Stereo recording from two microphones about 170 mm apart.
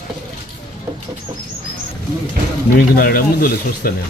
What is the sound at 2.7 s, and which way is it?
Speech, 60° left (ahead or behind).